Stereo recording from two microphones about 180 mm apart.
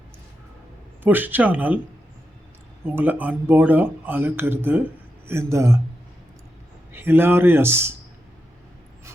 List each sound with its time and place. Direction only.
1.0 s speech: 10° right (ahead or behind)
2.8 s speech: 10° right (ahead or behind)
6.9 s speech: 10° right (ahead or behind)